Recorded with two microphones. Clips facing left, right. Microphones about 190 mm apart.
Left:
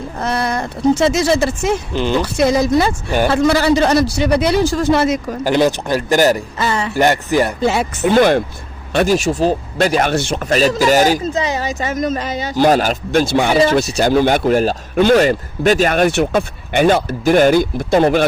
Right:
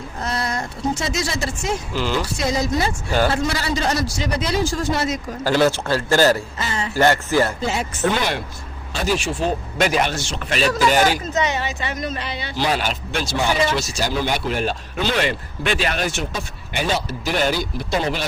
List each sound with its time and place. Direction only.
1.0 s a man's voice: 60° left (ahead or behind)
1.9 s speech: 20° left (ahead or behind)
2.1 s a man's voice: 60° left (ahead or behind)
5.4 s a man's voice: 15° left (ahead or behind)
6.6 s speech: 65° left (ahead or behind)
6.9 s a man's voice: 15° left (ahead or behind)
7.6 s speech: 70° left (ahead or behind)
8.1 s a man's voice: 50° left (ahead or behind); by 10.0 s 35° left (ahead or behind)
10.0 s a man's voice: 60° left (ahead or behind)
13.3 s a man's voice: 65° left (ahead or behind)